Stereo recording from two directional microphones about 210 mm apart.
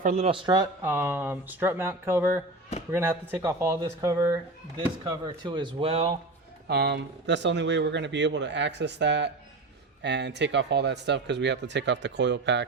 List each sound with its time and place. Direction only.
0.0 s speech: 40° right (ahead or behind)
0.3 s speech: 25° right (ahead or behind)
6.7 s speech: 50° right (ahead or behind)